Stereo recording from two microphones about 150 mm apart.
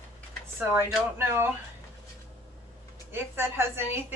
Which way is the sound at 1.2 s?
15° right (ahead or behind).